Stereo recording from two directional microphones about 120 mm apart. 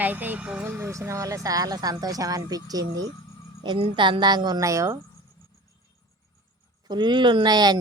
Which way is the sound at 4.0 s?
40° right (ahead or behind).